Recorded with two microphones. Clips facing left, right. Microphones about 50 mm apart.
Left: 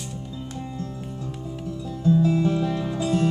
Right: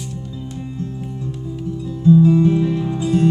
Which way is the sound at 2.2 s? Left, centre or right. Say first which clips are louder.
Right 7 dB; right.